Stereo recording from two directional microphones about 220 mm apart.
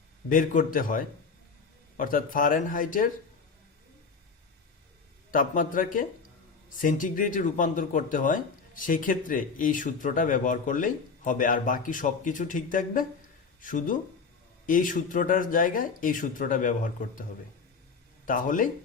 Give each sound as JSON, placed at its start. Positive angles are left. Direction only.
{"t": 0.3, "sound": "speech", "side_deg": 35}
{"t": 5.3, "sound": "speech", "side_deg": 35}
{"t": 18.3, "sound": "speech", "side_deg": 35}